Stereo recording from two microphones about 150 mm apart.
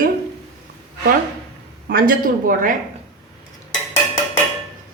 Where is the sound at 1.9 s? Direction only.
65° right (ahead or behind).